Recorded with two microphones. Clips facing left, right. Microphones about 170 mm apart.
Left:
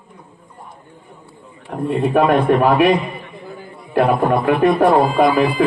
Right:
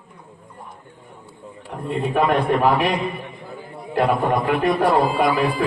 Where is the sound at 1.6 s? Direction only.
55° left (ahead or behind).